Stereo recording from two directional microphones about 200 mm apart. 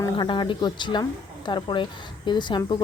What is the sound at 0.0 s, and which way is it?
A woman's voice, 25° left (ahead or behind).